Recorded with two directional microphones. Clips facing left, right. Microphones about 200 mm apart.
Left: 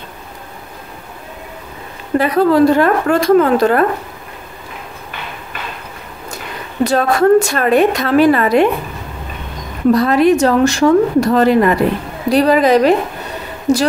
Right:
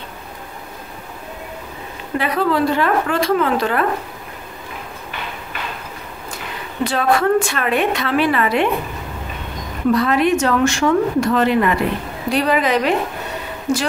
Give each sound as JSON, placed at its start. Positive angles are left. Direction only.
{"t": 2.1, "sound": "a woman's voice", "side_deg": 40}
{"t": 6.8, "sound": "a woman's voice", "side_deg": 40}
{"t": 9.9, "sound": "a woman's voice", "side_deg": 40}